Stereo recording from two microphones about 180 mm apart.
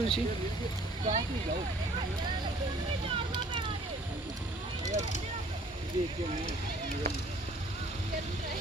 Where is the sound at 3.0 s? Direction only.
25° right (ahead or behind).